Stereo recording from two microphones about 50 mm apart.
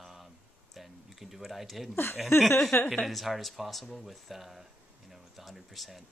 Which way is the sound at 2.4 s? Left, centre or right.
Centre.